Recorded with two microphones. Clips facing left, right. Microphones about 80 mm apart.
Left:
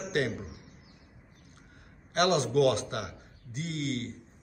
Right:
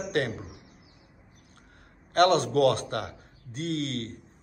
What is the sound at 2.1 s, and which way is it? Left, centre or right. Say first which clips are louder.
A man's voice: right 4 dB; right.